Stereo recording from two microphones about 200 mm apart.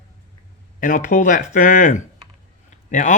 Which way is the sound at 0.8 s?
45° left (ahead or behind).